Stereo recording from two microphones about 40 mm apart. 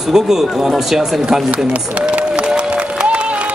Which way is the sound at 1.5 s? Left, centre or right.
Right.